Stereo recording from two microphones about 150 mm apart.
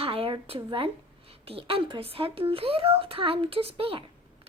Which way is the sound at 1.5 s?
35° right (ahead or behind).